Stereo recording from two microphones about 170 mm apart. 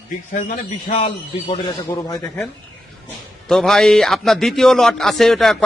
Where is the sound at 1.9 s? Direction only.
15° left (ahead or behind).